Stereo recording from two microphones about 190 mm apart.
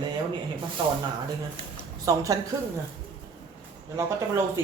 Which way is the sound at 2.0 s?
20° right (ahead or behind).